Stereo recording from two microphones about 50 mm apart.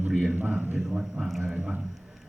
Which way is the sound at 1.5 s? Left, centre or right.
Centre.